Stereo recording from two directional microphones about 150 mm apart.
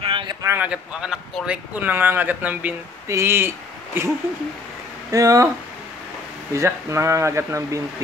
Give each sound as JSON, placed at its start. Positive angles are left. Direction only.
{"t": 0.0, "sound": "a sound", "side_deg": -35}
{"t": 0.4, "sound": "speech", "side_deg": -15}
{"t": 0.7, "sound": "speech", "side_deg": -5}
{"t": 5.1, "sound": "speech", "side_deg": -25}
{"t": 6.5, "sound": "speech", "side_deg": -20}